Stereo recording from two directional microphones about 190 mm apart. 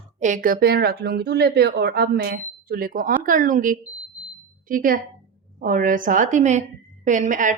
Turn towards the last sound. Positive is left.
turn(degrees=-45)  # may be behind; listen again after turning